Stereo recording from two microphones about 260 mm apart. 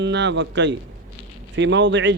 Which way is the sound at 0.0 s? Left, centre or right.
Right.